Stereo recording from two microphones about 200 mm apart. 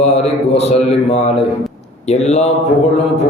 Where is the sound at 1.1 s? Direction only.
35° left (ahead or behind).